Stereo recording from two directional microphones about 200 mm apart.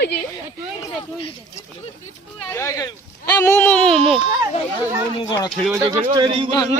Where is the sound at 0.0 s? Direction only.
55° left (ahead or behind).